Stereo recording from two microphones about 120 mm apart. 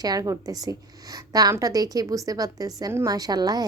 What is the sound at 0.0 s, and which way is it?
A woman's voice, 30° right (ahead or behind).